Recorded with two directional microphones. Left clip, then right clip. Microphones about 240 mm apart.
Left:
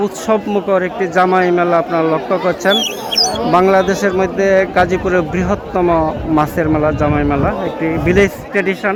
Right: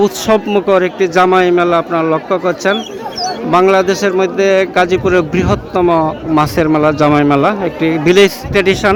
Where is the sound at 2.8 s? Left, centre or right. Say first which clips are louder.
Left 4 dB; left.